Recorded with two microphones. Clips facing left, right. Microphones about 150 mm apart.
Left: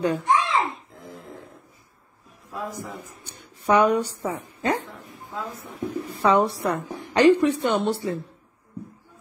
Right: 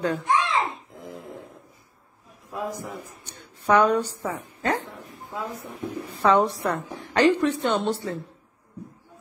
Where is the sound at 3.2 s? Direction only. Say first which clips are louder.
Left 1 dB; 10° left (ahead or behind).